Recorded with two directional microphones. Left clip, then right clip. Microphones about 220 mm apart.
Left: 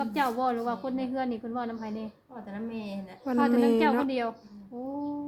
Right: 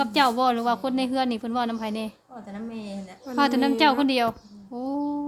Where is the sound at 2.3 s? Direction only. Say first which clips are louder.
Right 1 dB; 5° left (ahead or behind).